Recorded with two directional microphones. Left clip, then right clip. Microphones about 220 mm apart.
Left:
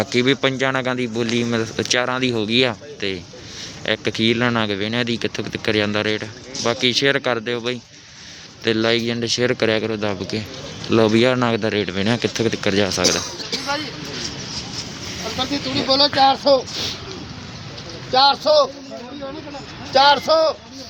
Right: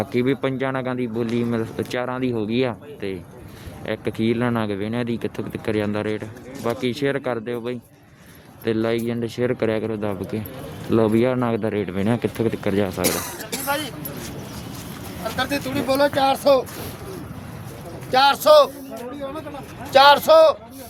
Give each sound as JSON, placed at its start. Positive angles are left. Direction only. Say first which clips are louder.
{"t": 0.0, "sound": "speech", "louder": "left 4 dB", "side_deg": 0}
{"t": 15.4, "sound": "speech", "louder": "left 1 dB", "side_deg": -5}
{"t": 18.1, "sound": "speech", "louder": "right 1 dB", "side_deg": -25}
{"t": 19.9, "sound": "speech", "louder": "right 2 dB", "side_deg": -15}